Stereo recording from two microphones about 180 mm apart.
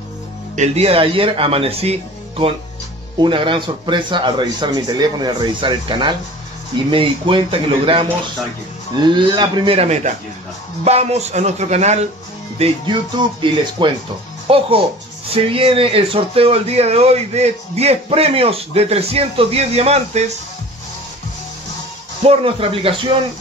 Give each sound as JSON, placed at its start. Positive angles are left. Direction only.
{"t": 0.6, "sound": "speech", "side_deg": -35}
{"t": 13.4, "sound": "speech", "side_deg": -25}
{"t": 22.2, "sound": "speech", "side_deg": -35}